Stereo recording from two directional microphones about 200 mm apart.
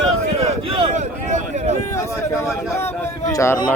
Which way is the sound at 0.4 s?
30° right (ahead or behind).